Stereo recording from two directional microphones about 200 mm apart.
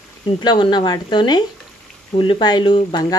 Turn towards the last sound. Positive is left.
turn(degrees=25)  # may be behind; listen again after turning